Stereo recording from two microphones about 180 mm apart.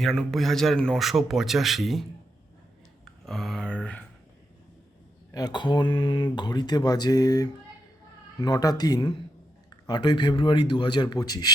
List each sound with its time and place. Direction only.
0.0 s speech: centre (ahead or behind)
3.0 s a sound: centre (ahead or behind)
5.3 s speech: 20° left (ahead or behind)